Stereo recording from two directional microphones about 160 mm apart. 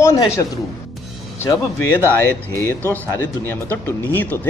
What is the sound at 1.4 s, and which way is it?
Speech, 15° left (ahead or behind).